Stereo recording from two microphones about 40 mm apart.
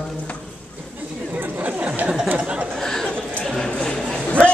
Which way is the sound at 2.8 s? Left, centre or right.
Centre.